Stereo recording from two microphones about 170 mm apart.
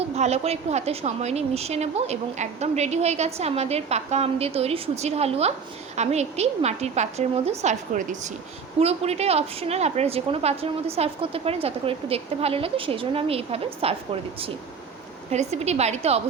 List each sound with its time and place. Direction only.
0.2 s a woman's voice: 40° right (ahead or behind)